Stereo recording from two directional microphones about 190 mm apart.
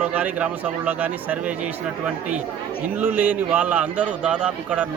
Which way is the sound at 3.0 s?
10° right (ahead or behind).